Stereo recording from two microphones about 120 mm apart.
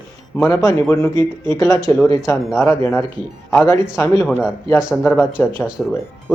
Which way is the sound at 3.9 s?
25° left (ahead or behind).